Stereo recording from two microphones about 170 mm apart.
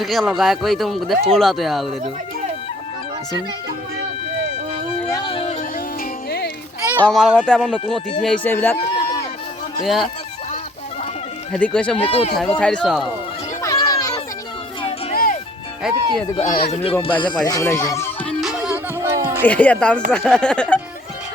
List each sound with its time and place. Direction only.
0.0 s speech: centre (ahead or behind)
5.1 s a sound: 30° left (ahead or behind)
7.0 s speech: centre (ahead or behind)
9.8 s speech: centre (ahead or behind)
11.5 s speech: 5° left (ahead or behind)
11.9 s speech: 35° left (ahead or behind)
12.5 s speech: 5° left (ahead or behind)
13.6 s a sound: 20° left (ahead or behind)
15.1 s music: 60° left (ahead or behind)
15.9 s speech: 5° right (ahead or behind)
16.3 s speech: 30° left (ahead or behind)
17.4 s music: 20° left (ahead or behind); by 19.5 s 15° right (ahead or behind)
19.5 s speech: 10° left (ahead or behind)